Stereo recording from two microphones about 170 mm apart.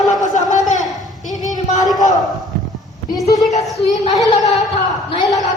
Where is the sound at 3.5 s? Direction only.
40° left (ahead or behind).